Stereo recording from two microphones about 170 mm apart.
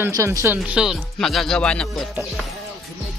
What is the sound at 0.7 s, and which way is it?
Speech, centre (ahead or behind).